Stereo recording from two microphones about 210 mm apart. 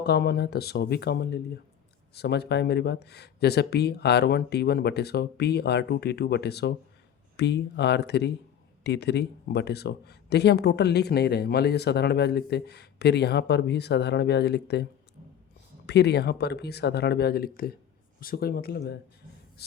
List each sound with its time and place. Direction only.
0.0 s speech: 50° left (ahead or behind)
15.9 s speech: 50° left (ahead or behind)